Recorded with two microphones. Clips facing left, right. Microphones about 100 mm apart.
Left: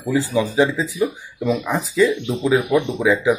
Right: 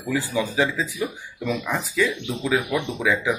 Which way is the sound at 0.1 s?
20° left (ahead or behind).